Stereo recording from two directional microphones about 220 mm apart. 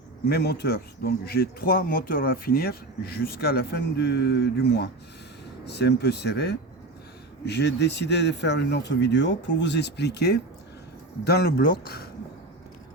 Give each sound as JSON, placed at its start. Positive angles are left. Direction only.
{"t": 0.3, "sound": "speech", "side_deg": 45}